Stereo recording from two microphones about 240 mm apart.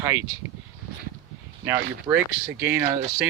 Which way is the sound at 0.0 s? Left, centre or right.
Centre.